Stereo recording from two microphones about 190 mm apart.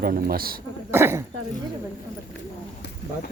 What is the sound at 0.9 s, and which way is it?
Speech, 15° right (ahead or behind).